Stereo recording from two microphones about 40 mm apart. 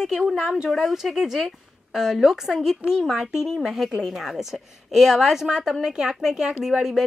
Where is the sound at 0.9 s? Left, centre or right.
Centre.